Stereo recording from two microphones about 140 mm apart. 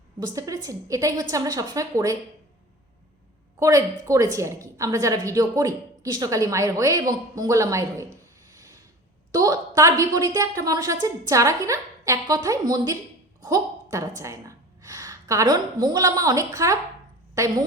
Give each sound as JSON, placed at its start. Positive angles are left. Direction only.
{"t": 0.2, "sound": "a woman's voice", "side_deg": -25}
{"t": 3.6, "sound": "a woman's voice", "side_deg": -20}
{"t": 8.4, "sound": "a sound", "side_deg": -20}
{"t": 9.3, "sound": "a woman's voice", "side_deg": -25}
{"t": 13.4, "sound": "a sound", "side_deg": -25}
{"t": 14.2, "sound": "a woman's voice", "side_deg": -20}